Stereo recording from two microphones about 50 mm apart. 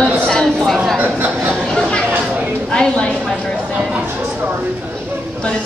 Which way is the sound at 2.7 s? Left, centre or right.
Centre.